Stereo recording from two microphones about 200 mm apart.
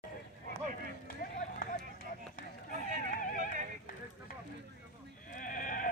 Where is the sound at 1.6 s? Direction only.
45° left (ahead or behind).